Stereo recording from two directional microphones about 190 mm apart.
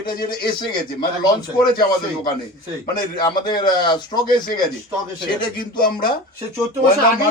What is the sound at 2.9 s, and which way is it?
A man's voice, 20° left (ahead or behind).